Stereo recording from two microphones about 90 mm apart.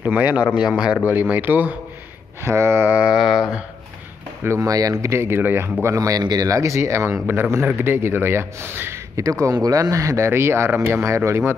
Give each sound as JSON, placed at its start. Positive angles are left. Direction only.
{"t": 0.0, "sound": "speech", "side_deg": -20}
{"t": 0.6, "sound": "speech", "side_deg": -10}
{"t": 1.3, "sound": "speech", "side_deg": -20}
{"t": 2.4, "sound": "speech", "side_deg": -30}
{"t": 2.9, "sound": "speech", "side_deg": -15}
{"t": 4.6, "sound": "a man's voice", "side_deg": -40}
{"t": 5.9, "sound": "a man's voice", "side_deg": -45}